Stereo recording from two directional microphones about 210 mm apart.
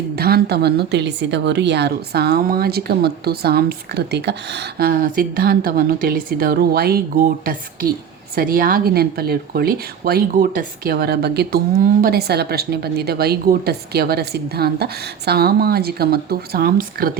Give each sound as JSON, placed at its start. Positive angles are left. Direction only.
{"t": 0.2, "sound": "speech", "side_deg": -50}